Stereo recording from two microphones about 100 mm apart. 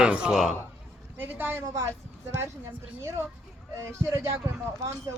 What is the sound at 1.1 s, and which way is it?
Speech, 20° right (ahead or behind).